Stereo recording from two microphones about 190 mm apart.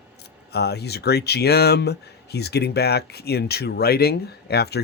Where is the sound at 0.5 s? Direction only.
60° left (ahead or behind).